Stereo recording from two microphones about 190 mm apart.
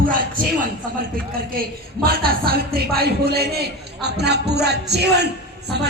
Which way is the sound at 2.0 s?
50° right (ahead or behind).